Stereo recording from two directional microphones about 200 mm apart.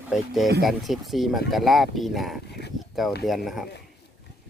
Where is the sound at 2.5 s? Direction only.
55° left (ahead or behind).